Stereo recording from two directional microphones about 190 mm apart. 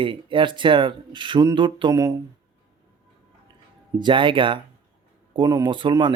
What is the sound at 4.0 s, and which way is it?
Speech, 25° right (ahead or behind).